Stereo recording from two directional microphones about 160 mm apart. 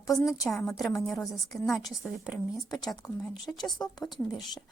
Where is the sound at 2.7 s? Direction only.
25° left (ahead or behind).